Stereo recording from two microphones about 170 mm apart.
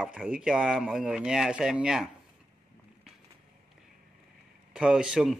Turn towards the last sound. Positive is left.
turn(degrees=-5)  # may be behind; listen again after turning